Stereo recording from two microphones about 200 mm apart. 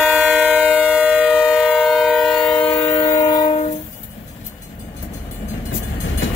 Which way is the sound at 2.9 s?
20° left (ahead or behind).